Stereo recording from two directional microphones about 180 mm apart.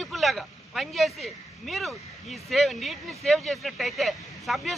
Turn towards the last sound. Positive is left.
turn(degrees=0)  # may be behind; listen again after turning